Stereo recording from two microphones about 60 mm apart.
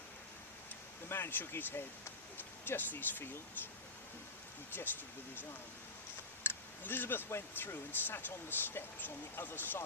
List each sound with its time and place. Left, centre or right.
1.0 s speech: left
6.4 s speech: left